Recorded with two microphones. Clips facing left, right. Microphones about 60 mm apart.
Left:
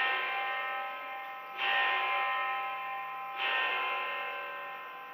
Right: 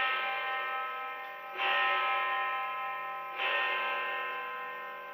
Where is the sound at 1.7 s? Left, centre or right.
Centre.